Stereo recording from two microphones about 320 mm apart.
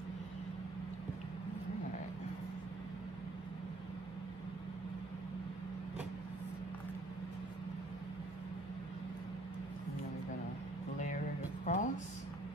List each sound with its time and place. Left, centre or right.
11.6 s music: left